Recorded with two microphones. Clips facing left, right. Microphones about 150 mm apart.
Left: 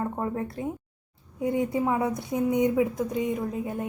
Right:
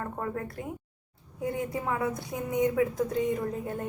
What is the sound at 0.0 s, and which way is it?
A woman's voice, 20° left (ahead or behind).